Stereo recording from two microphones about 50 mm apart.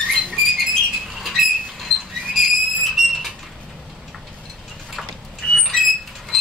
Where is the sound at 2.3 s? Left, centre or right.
Centre.